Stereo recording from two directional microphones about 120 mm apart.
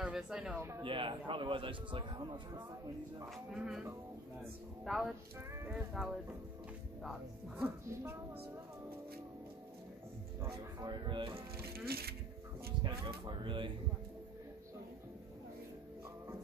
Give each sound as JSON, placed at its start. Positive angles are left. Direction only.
{"t": 0.0, "sound": "speech", "side_deg": -5}
{"t": 0.6, "sound": "speech", "side_deg": -20}
{"t": 0.8, "sound": "a man's voice", "side_deg": -45}
{"t": 3.5, "sound": "speech", "side_deg": -5}
{"t": 4.8, "sound": "speech", "side_deg": -5}
{"t": 7.6, "sound": "speech", "side_deg": -20}
{"t": 10.4, "sound": "a man's voice", "side_deg": -35}
{"t": 12.8, "sound": "speech", "side_deg": -35}